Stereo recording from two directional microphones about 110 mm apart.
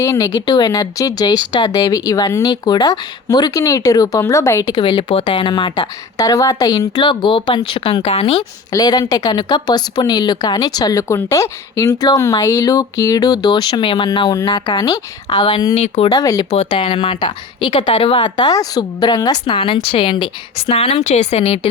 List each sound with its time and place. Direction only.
0.0 s a woman's voice: 30° left (ahead or behind)
4.6 s speech: 45° left (ahead or behind)
6.1 s speech: 35° left (ahead or behind); by 8.4 s 60° left (ahead or behind)
8.7 s a woman's voice: 35° left (ahead or behind)
15.7 s speech: 70° left (ahead or behind)
16.1 s a woman's voice: 35° left (ahead or behind)
16.6 s speech: 50° left (ahead or behind)
17.2 s a woman's voice: 45° left (ahead or behind)
19.5 s speech: 50° left (ahead or behind)
20.7 s speech: 75° left (ahead or behind)